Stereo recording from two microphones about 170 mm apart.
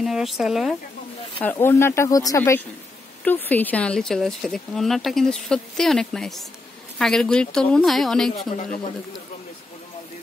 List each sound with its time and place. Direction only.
0.0 s speech: centre (ahead or behind)
1.4 s speech: 10° left (ahead or behind)